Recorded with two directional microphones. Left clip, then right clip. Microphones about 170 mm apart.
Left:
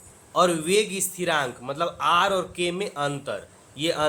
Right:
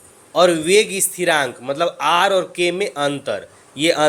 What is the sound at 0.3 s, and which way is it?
A man's voice, 15° right (ahead or behind).